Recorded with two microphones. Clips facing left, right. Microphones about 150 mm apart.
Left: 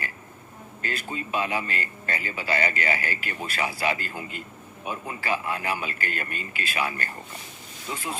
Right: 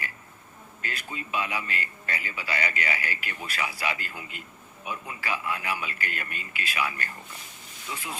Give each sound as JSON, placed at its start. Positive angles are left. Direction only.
{"t": 0.8, "sound": "a man's voice", "side_deg": 35}